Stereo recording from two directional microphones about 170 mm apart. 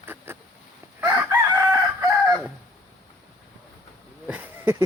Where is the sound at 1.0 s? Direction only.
10° right (ahead or behind).